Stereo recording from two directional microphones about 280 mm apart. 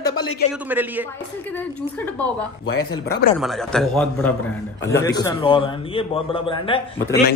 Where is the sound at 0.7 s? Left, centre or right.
Centre.